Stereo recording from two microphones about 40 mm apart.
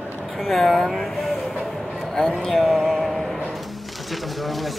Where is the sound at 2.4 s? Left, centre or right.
Centre.